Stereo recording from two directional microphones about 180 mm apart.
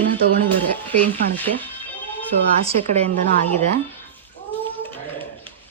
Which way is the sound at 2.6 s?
35° right (ahead or behind).